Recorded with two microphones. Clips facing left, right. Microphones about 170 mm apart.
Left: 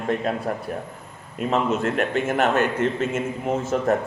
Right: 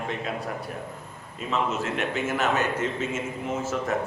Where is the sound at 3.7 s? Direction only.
45° left (ahead or behind).